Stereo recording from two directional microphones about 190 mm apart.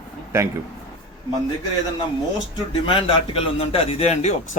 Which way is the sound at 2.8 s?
30° left (ahead or behind).